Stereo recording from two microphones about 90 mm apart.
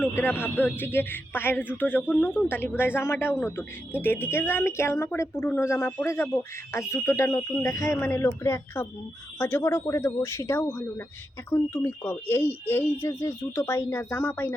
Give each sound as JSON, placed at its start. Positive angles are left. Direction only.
{"t": 0.0, "sound": "speech", "side_deg": 25}
{"t": 11.5, "sound": "speech", "side_deg": 35}